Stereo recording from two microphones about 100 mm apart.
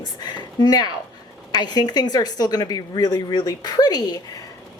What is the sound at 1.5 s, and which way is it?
A woman's voice, 45° left (ahead or behind).